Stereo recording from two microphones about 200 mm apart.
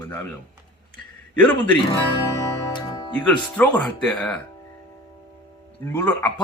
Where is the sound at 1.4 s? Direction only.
5° left (ahead or behind).